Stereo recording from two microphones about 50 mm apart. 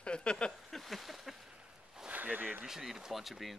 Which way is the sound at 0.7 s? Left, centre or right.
Centre.